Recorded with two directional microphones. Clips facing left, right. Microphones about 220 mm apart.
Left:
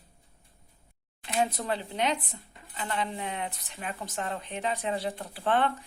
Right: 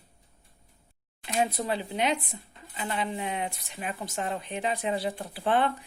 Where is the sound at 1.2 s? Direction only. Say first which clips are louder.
Right 1 dB; 10° right (ahead or behind).